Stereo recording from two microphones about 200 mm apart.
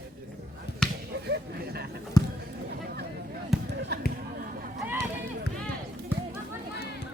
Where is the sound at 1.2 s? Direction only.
55° right (ahead or behind).